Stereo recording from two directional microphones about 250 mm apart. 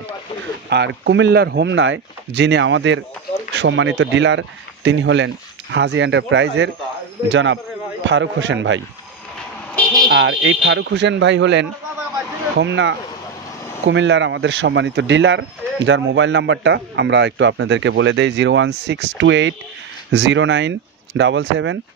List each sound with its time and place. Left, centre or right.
0.7 s speech: right
10.0 s speech: right